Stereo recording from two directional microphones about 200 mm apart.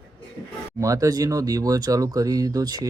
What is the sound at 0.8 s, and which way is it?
Speech, 15° right (ahead or behind).